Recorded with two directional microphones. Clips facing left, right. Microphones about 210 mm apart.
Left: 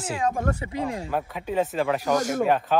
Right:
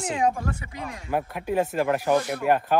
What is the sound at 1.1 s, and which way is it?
Speech, 10° right (ahead or behind).